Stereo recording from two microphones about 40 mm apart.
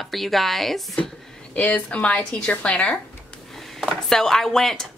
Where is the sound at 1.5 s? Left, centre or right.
Left.